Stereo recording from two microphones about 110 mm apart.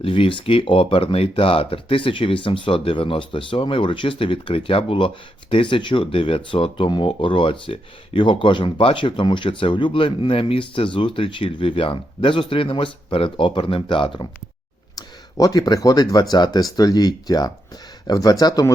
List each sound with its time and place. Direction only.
0.0 s speech: 55° left (ahead or behind)
14.9 s speech: 35° left (ahead or behind)